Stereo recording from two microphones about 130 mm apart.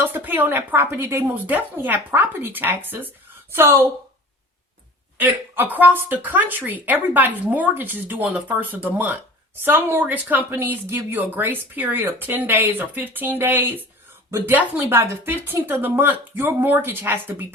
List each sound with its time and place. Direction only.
0.0 s speech: 15° right (ahead or behind)
5.7 s speech: 15° right (ahead or behind)